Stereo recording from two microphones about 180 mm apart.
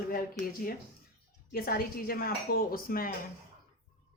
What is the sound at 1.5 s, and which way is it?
Speech, 55° left (ahead or behind).